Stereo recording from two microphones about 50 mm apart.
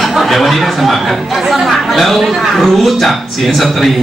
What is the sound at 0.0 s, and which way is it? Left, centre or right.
Speech, centre.